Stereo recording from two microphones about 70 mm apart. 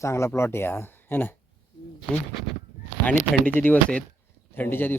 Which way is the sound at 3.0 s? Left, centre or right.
Left.